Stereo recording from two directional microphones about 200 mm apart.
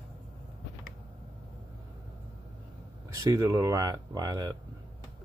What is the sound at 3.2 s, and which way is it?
Speech, 15° right (ahead or behind).